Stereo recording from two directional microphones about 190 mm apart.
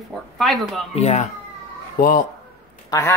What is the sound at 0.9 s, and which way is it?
Speech, 35° left (ahead or behind).